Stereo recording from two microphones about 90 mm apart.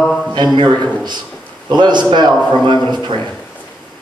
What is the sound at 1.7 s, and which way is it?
Speech, 55° right (ahead or behind).